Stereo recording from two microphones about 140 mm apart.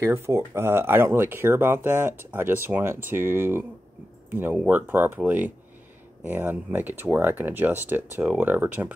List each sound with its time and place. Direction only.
0.0 s speech: 20° right (ahead or behind)